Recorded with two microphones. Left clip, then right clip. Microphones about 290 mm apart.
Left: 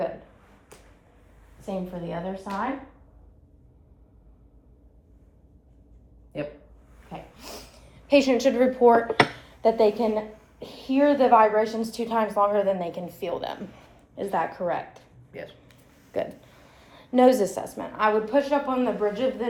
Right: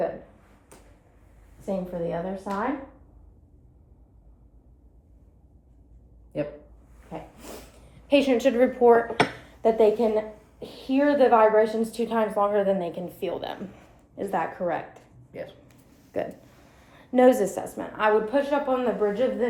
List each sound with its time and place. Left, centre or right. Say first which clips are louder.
1.6 s a woman's voice: right 4 dB; centre
7.1 s snort: right 1 dB; centre
8.0 s speech: left 1 dB; centre
15.3 s speech: right 2 dB; centre
15.6 s a sound: left 1 dB; left
16.4 s a woman's voice: left 2 dB; centre